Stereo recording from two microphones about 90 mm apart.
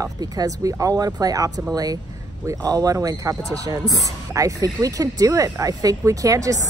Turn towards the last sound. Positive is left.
turn(degrees=-40)  # may be behind; listen again after turning